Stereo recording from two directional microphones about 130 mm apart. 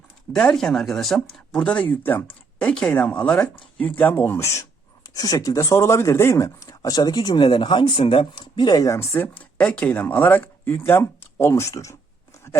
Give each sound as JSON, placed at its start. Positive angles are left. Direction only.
{"t": 0.3, "sound": "speech", "side_deg": 5}